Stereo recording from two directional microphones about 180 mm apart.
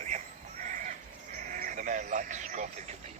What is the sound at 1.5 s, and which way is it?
Speech, 45° right (ahead or behind).